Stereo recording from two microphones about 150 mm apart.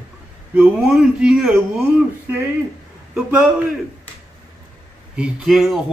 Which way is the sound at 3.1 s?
10° right (ahead or behind).